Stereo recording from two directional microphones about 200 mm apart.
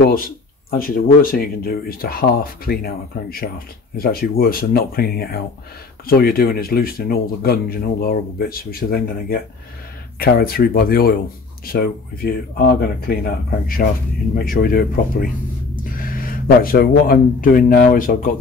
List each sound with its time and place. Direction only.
0.7 s speech: 45° left (ahead or behind)